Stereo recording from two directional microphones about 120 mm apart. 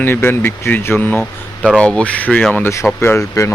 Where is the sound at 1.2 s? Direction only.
5° right (ahead or behind).